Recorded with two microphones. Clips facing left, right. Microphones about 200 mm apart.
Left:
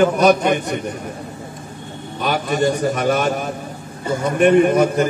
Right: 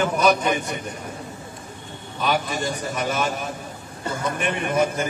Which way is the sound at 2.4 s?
65° left (ahead or behind).